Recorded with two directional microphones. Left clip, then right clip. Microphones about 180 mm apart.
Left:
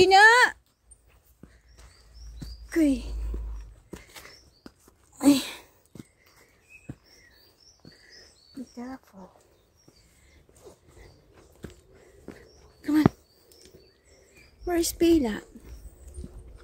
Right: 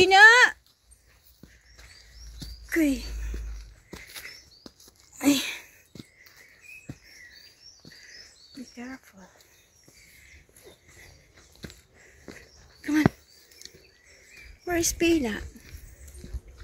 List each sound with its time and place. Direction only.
0.0 s a sound: 15° left (ahead or behind)
2.7 s speech: 10° left (ahead or behind)
5.1 s sneeze: 25° left (ahead or behind)
8.7 s speech: 10° left (ahead or behind)
12.4 s dog: 20° left (ahead or behind)
14.6 s a woman's voice: 15° left (ahead or behind)